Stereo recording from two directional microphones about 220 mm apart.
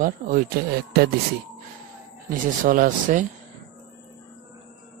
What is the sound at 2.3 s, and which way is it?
Speech, 40° right (ahead or behind).